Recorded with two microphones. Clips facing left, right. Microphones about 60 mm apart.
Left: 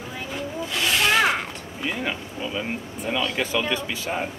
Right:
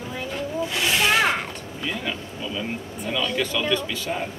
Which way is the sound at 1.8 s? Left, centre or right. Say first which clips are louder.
Left 2 dB; centre.